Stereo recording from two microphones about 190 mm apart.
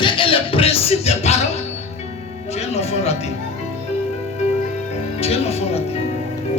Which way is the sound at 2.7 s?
35° left (ahead or behind).